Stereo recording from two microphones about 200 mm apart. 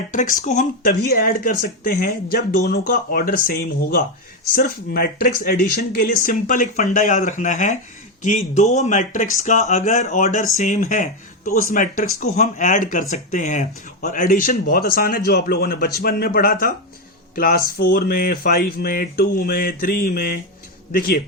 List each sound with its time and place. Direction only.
0.1 s speech: 40° left (ahead or behind)